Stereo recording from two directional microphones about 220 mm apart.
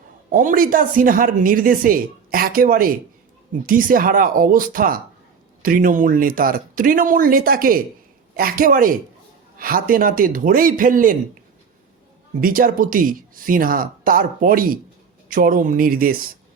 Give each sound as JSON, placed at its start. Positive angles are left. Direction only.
{"t": 0.3, "sound": "speech", "side_deg": -35}
{"t": 12.4, "sound": "speech", "side_deg": -40}